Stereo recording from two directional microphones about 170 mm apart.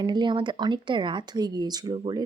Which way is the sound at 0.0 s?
25° right (ahead or behind).